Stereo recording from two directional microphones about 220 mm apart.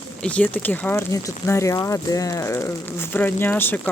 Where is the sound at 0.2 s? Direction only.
5° left (ahead or behind).